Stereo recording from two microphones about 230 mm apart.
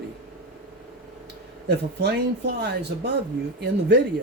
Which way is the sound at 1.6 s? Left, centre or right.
Right.